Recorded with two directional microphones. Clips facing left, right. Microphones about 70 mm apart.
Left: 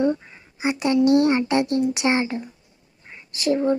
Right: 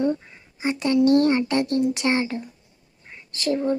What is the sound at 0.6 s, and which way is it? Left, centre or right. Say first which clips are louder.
A child's voice: left 1 dB; centre.